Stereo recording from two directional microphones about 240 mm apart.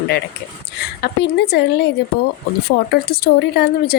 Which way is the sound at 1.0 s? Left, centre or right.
Left.